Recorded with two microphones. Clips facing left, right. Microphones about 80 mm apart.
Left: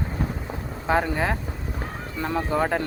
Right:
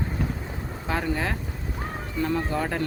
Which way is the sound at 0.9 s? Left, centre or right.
Left.